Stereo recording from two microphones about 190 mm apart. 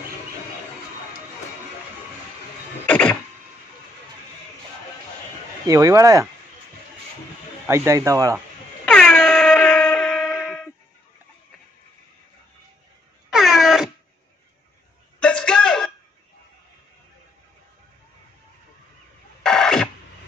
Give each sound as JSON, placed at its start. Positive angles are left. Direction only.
{"t": 2.9, "sound": "music", "side_deg": 5}
{"t": 5.7, "sound": "speech", "side_deg": -15}
{"t": 7.6, "sound": "speech", "side_deg": -15}
{"t": 8.8, "sound": "air horn", "side_deg": 5}
{"t": 13.3, "sound": "air horn", "side_deg": 0}
{"t": 15.2, "sound": "a sound", "side_deg": 5}
{"t": 19.4, "sound": "music", "side_deg": 5}